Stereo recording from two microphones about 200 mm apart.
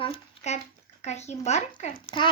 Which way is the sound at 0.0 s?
30° left (ahead or behind).